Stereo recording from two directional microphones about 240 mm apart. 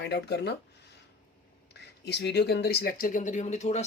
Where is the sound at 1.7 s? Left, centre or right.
Left.